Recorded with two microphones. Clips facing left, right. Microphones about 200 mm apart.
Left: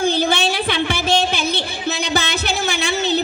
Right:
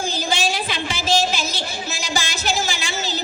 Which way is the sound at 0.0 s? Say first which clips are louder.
Left 6 dB; 60° left (ahead or behind).